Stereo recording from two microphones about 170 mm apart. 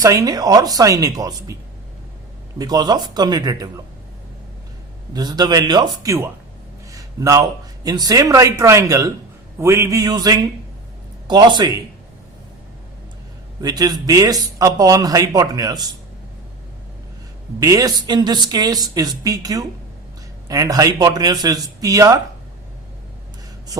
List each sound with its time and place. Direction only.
0.0 s a man's voice: 20° right (ahead or behind)
2.6 s a man's voice: 25° right (ahead or behind)
5.1 s a man's voice: 25° right (ahead or behind)
6.9 s a sound: 20° right (ahead or behind)
7.9 s a man's voice: 20° right (ahead or behind)
13.6 s a man's voice: 25° right (ahead or behind)
17.6 s a man's voice: 20° right (ahead or behind)